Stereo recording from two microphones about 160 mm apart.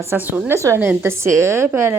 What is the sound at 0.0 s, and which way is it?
Speech, 15° right (ahead or behind).